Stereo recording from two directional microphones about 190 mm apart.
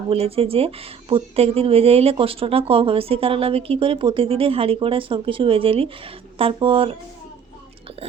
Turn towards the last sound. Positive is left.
turn(degrees=-30)  # may be behind; listen again after turning